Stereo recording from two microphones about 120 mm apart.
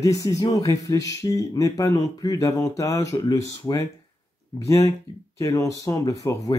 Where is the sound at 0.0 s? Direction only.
30° left (ahead or behind).